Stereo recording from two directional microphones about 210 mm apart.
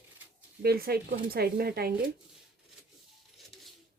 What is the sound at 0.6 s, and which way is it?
A woman's voice, 50° right (ahead or behind).